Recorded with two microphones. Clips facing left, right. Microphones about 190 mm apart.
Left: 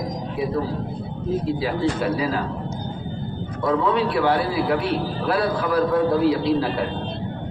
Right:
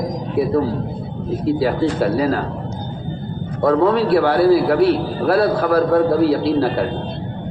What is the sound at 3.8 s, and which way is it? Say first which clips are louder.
A man's voice: right 5 dB; 45° right (ahead or behind).